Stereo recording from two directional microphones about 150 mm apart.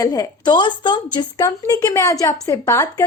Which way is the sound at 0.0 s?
25° left (ahead or behind).